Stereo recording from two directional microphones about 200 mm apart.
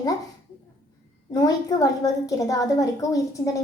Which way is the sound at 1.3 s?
20° left (ahead or behind).